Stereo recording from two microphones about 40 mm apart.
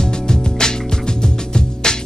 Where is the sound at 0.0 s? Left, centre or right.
Centre.